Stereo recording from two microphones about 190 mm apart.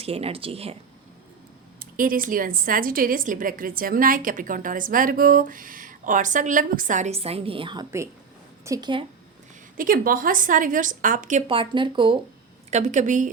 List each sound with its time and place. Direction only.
0.0 s speech: 30° right (ahead or behind)
1.8 s a woman's voice: 45° right (ahead or behind); by 9.0 s 25° right (ahead or behind)
9.7 s a woman's voice: 50° right (ahead or behind)
11.4 s speech: 25° right (ahead or behind)
12.7 s speech: 40° right (ahead or behind)